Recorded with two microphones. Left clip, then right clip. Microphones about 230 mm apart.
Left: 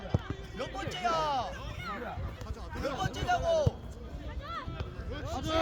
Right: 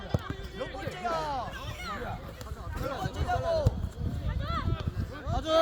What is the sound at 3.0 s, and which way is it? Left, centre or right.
Speech, left.